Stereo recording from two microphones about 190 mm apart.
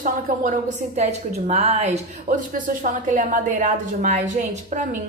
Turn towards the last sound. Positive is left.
turn(degrees=-40)  # may be behind; listen again after turning